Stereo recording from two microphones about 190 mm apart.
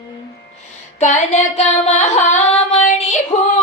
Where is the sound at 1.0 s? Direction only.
40° left (ahead or behind).